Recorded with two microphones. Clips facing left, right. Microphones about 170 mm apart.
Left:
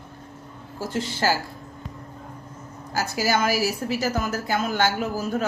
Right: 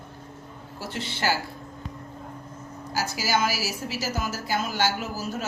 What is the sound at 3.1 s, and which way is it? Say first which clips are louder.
A woman's voice: left 4 dB; 55° left (ahead or behind).